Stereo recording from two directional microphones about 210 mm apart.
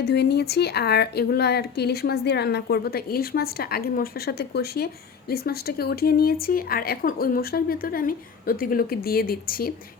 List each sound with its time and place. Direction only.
0.0 s speech: 50° left (ahead or behind)